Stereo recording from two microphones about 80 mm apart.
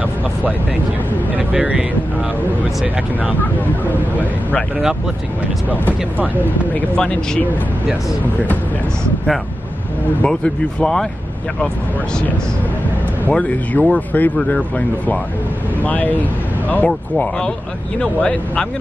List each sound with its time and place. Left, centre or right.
1.5 s speech: centre
3.3 s speech: left
5.9 s speech: right
6.4 s speech: centre
10.2 s speech: centre
13.3 s speech: centre
15.8 s speech: centre